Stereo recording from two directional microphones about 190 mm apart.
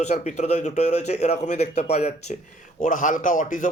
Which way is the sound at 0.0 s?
35° left (ahead or behind).